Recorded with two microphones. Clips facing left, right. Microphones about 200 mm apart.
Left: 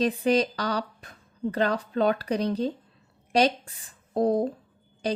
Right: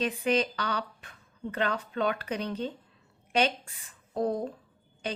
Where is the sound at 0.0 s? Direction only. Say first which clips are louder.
Left 5 dB; 35° left (ahead or behind).